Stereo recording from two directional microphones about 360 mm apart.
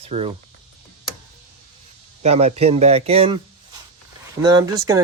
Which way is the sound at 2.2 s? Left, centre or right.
Centre.